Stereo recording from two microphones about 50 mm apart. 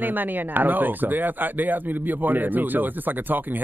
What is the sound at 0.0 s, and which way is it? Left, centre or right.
Speech, right.